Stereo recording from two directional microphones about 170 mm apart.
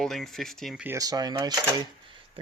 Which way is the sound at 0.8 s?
20° right (ahead or behind).